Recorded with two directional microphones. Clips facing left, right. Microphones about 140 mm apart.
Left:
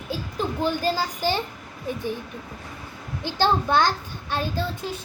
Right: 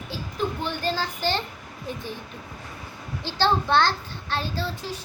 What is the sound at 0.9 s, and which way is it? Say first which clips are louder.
Speech: left 2 dB; 10° left (ahead or behind).